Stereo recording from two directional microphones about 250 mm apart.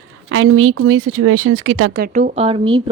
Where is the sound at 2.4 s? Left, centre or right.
Right.